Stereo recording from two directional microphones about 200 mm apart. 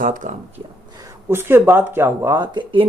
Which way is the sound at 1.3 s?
10° right (ahead or behind).